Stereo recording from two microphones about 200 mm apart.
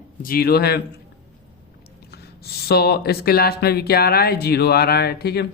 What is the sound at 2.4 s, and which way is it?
Speech, 50° left (ahead or behind).